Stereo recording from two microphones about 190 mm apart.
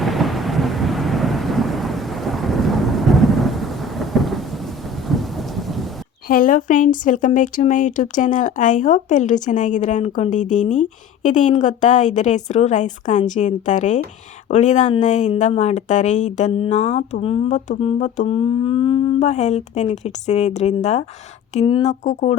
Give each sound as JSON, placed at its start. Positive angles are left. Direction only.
{"t": 0.0, "sound": "thunder", "side_deg": 0}
{"t": 6.2, "sound": "speech", "side_deg": 45}